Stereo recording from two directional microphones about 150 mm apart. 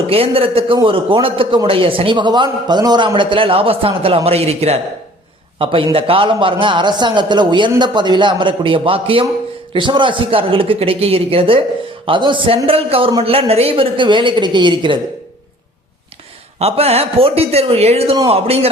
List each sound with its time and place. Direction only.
0.1 s a man's voice: 40° right (ahead or behind)
16.6 s a man's voice: 40° right (ahead or behind)